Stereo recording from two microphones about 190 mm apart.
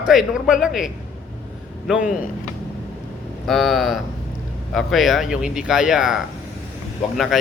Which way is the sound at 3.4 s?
Centre (ahead or behind).